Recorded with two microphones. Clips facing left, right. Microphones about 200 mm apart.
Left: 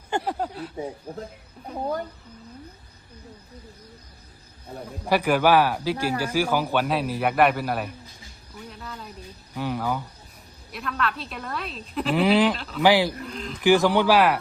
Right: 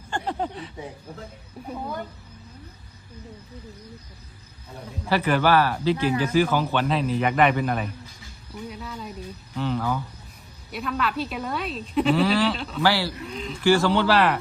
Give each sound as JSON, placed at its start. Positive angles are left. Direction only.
{"t": 0.2, "sound": "a woman's voice", "side_deg": 5}
{"t": 5.0, "sound": "a woman's voice", "side_deg": 15}
{"t": 9.6, "sound": "speech", "side_deg": 10}
{"t": 10.7, "sound": "a woman's voice", "side_deg": 0}
{"t": 12.1, "sound": "speech", "side_deg": 20}
{"t": 12.5, "sound": "a woman's voice", "side_deg": 0}
{"t": 12.8, "sound": "speech", "side_deg": 15}
{"t": 13.2, "sound": "a woman's voice", "side_deg": 0}
{"t": 13.6, "sound": "speech", "side_deg": 15}